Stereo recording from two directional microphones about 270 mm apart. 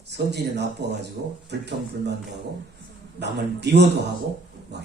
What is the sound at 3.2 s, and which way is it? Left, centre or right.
Speech, right.